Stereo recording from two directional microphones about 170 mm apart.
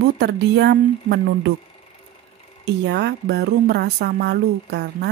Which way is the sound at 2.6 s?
80° right.